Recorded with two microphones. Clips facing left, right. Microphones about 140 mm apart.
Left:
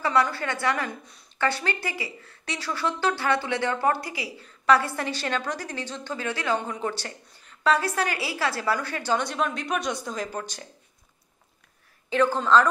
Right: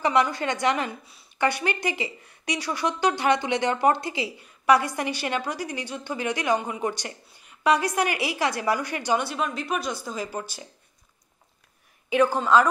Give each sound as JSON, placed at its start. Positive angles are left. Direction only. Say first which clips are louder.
{"t": 0.0, "sound": "speech", "louder": "right 1 dB", "side_deg": -20}
{"t": 4.4, "sound": "a woman's voice", "louder": "even", "side_deg": -15}
{"t": 12.1, "sound": "a woman's voice", "louder": "right 1 dB", "side_deg": -15}